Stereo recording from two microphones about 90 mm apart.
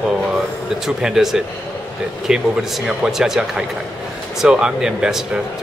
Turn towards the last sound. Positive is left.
turn(degrees=-5)  # may be behind; listen again after turning